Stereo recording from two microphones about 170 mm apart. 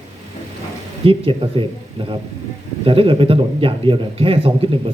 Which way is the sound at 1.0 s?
30° right (ahead or behind).